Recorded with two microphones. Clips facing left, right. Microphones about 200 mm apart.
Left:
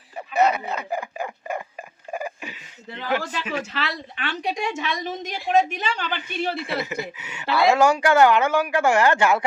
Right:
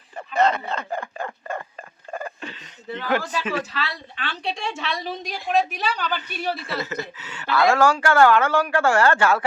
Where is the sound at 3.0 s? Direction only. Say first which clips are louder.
Right 1 dB; 50° right (ahead or behind).